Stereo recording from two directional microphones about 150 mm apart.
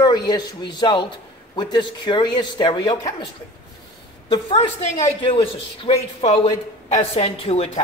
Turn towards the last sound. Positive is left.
turn(degrees=40)  # may be behind; listen again after turning